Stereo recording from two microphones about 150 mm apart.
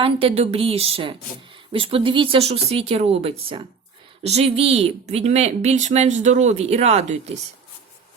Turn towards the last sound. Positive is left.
turn(degrees=-45)  # may be behind; listen again after turning